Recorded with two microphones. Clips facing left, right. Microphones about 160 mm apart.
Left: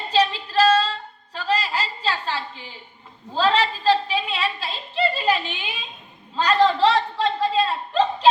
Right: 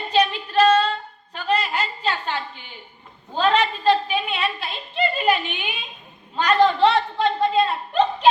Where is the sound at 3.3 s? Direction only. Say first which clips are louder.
Right 1 dB; 30° left (ahead or behind).